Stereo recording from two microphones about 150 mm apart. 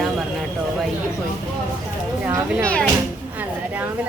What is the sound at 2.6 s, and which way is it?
Speech, 10° left (ahead or behind).